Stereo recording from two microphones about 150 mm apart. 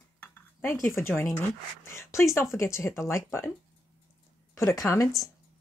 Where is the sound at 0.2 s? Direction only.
15° left (ahead or behind).